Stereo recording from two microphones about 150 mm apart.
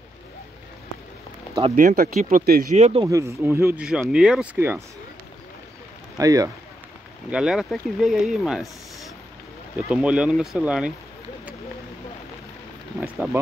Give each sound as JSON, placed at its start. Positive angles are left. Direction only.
{"t": 1.8, "sound": "speech", "side_deg": -65}
{"t": 2.3, "sound": "speech", "side_deg": -80}
{"t": 2.7, "sound": "speech", "side_deg": -45}
{"t": 3.1, "sound": "speech", "side_deg": -20}
{"t": 3.8, "sound": "speech", "side_deg": -5}
{"t": 6.1, "sound": "speech", "side_deg": -25}
{"t": 7.2, "sound": "speech", "side_deg": -5}
{"t": 9.8, "sound": "speech", "side_deg": -5}
{"t": 13.0, "sound": "speech", "side_deg": -10}